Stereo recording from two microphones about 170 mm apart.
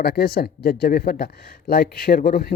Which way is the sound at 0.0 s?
65° left (ahead or behind).